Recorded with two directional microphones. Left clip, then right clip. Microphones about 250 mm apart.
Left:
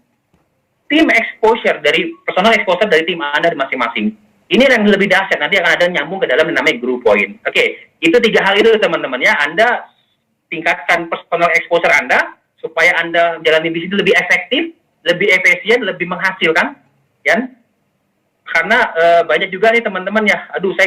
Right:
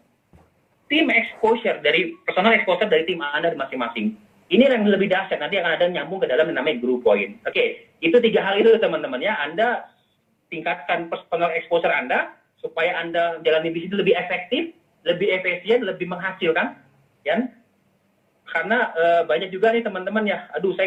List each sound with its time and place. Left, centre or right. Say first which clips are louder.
0.9 s speech: left 7 dB; left